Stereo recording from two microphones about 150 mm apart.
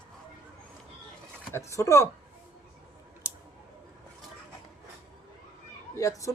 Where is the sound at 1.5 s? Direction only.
20° left (ahead or behind).